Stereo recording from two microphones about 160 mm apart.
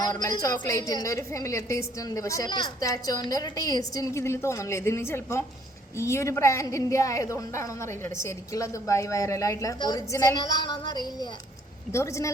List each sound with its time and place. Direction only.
0.0 s a woman's voice: 20° left (ahead or behind)